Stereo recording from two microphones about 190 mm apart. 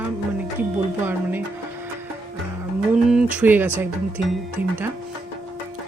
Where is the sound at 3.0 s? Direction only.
5° right (ahead or behind).